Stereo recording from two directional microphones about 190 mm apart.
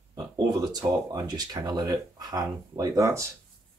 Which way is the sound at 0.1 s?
20° right (ahead or behind).